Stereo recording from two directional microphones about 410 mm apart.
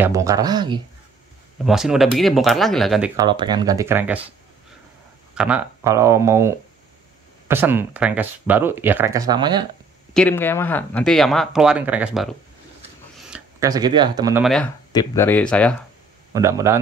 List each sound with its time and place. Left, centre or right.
0.0 s speech: centre
5.3 s speech: centre
10.1 s speech: centre
13.3 s speech: centre
16.3 s speech: centre